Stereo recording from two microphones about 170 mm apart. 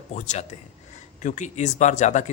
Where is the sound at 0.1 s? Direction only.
45° left (ahead or behind).